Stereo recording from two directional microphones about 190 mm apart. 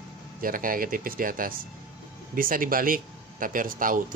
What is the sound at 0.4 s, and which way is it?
Speech, 45° right (ahead or behind).